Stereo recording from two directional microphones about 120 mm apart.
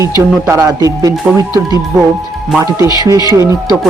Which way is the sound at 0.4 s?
25° right (ahead or behind).